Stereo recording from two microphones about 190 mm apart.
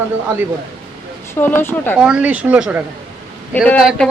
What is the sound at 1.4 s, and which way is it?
Speech, 10° left (ahead or behind).